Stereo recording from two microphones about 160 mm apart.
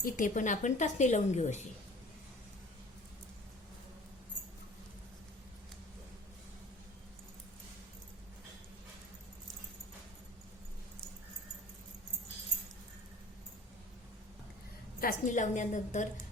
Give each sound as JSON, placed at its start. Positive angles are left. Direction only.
{"t": 0.0, "sound": "a woman's voice", "side_deg": 55}
{"t": 15.0, "sound": "a woman's voice", "side_deg": 55}